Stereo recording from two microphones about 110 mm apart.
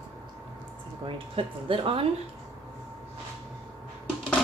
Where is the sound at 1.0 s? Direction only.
55° right (ahead or behind).